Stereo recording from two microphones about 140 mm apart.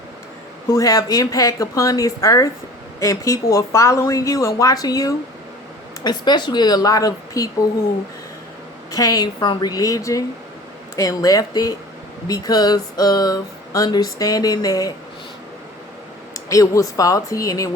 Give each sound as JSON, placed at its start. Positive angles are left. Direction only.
{"t": 0.7, "sound": "speech", "side_deg": 25}
{"t": 8.9, "sound": "speech", "side_deg": 25}
{"t": 16.3, "sound": "speech", "side_deg": 25}